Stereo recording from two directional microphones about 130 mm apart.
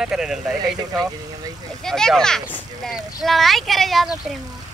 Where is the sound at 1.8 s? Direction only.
5° left (ahead or behind).